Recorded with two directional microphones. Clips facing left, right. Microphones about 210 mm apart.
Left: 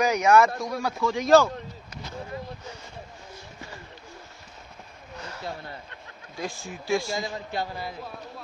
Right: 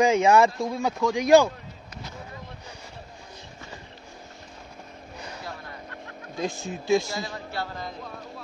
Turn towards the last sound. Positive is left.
turn(degrees=15)  # may be behind; listen again after turning